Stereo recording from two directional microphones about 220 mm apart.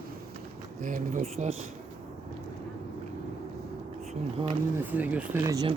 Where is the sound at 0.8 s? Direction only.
35° right (ahead or behind).